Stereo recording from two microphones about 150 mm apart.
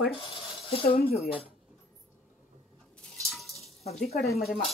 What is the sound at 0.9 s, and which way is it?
Speech, 90° left.